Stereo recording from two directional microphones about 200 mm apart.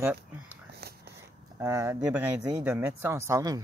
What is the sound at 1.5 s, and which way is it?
Speech, 15° right (ahead or behind).